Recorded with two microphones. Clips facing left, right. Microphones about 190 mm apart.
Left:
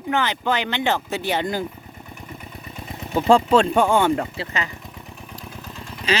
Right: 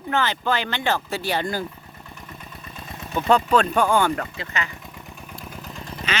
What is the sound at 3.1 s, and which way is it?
Speech, 30° left (ahead or behind).